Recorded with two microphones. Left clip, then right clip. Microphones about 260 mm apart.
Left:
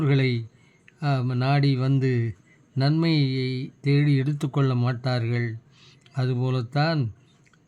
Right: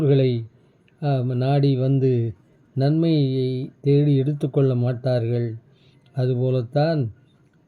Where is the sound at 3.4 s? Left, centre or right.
Left.